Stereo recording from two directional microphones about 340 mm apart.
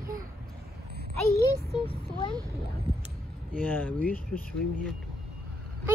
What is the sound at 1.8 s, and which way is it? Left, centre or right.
Speech, centre.